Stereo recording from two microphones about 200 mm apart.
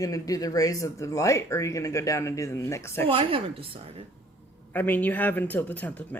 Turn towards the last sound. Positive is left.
turn(degrees=10)  # may be behind; listen again after turning